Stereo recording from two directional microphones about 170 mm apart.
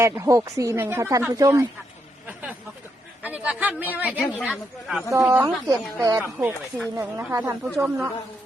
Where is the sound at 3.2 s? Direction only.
10° right (ahead or behind).